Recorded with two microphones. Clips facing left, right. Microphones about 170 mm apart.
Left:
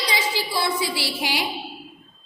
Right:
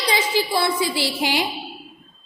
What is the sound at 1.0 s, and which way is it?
Speech, 50° right (ahead or behind).